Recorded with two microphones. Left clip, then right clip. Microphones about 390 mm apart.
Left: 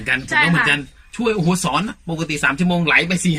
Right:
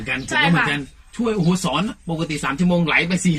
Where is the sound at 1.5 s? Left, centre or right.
Left.